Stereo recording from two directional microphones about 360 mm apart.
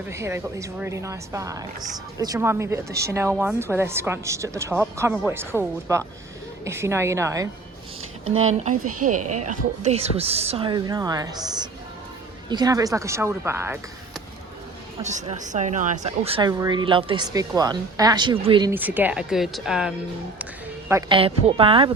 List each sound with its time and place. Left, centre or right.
0.1 s a woman's voice: centre
8.2 s speech: right
9.5 s a woman's voice: centre
15.0 s a woman's voice: centre